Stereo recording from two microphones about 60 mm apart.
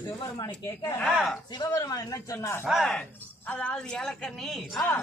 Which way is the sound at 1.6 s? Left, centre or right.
Left.